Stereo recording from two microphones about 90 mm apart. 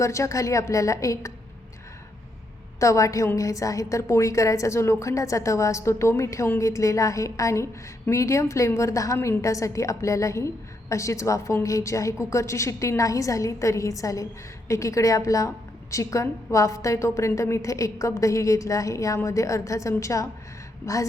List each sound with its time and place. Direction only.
0.0 s a woman's voice: 35° left (ahead or behind)
2.8 s a woman's voice: 35° left (ahead or behind)
9.1 s a woman's voice: 25° left (ahead or behind)
9.4 s a woman's voice: 35° left (ahead or behind)